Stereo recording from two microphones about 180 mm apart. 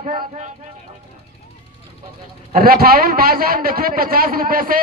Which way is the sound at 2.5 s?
55° right (ahead or behind).